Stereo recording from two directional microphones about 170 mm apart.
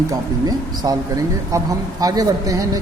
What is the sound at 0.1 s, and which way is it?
Speech, 20° right (ahead or behind).